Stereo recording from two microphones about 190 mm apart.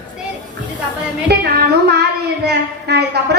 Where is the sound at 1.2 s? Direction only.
55° right (ahead or behind).